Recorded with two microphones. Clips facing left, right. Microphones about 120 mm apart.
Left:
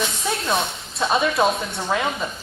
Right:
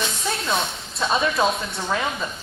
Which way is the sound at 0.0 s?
Centre (ahead or behind).